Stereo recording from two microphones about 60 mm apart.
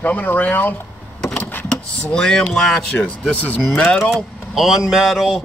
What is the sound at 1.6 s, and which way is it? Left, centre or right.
Speech, centre.